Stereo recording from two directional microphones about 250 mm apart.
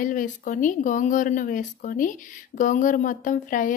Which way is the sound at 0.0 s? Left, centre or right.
Left.